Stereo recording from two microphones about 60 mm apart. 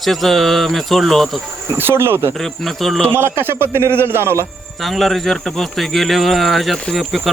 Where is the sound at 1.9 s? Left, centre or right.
Right.